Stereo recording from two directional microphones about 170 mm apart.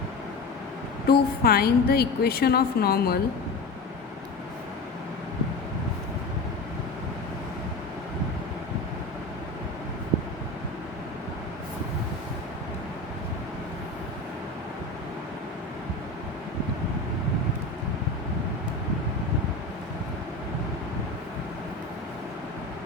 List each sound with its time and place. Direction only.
1.0 s a woman's voice: 65° left (ahead or behind)